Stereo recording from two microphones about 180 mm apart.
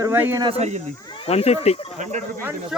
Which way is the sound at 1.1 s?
30° left (ahead or behind).